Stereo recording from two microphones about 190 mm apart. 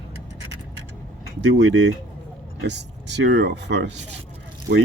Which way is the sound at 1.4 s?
70° right (ahead or behind).